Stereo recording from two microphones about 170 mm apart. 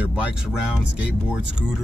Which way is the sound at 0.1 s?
5° right (ahead or behind).